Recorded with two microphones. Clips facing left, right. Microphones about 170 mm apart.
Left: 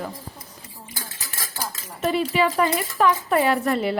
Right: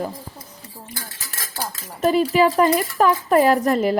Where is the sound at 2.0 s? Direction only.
40° right (ahead or behind).